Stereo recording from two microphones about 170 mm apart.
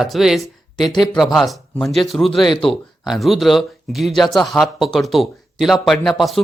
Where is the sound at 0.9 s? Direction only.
25° left (ahead or behind).